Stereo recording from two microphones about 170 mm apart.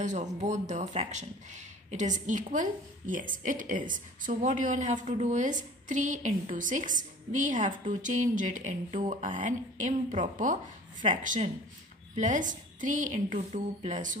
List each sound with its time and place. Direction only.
0.0 s speech: 45° right (ahead or behind)